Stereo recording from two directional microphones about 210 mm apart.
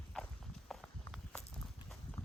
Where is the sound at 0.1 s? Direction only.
5° left (ahead or behind).